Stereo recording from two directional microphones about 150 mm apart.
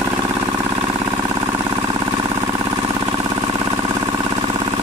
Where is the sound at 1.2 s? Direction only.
15° right (ahead or behind).